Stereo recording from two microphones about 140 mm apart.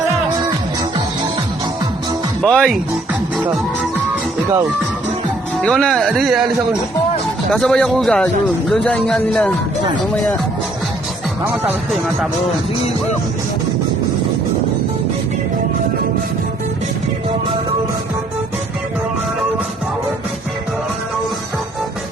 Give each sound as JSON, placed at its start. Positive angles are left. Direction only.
{"t": 2.4, "sound": "speech", "side_deg": 5}
{"t": 5.6, "sound": "speech", "side_deg": 5}
{"t": 7.5, "sound": "speech", "side_deg": 5}
{"t": 11.4, "sound": "speech", "side_deg": -15}